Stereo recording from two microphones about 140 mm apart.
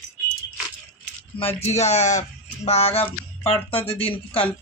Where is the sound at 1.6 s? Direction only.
50° left (ahead or behind).